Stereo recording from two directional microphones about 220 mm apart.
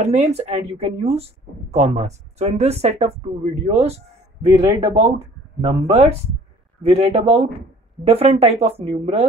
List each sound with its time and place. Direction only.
0.0 s speech: 30° right (ahead or behind)
4.6 s speech: 20° right (ahead or behind)
5.6 s speech: 30° right (ahead or behind)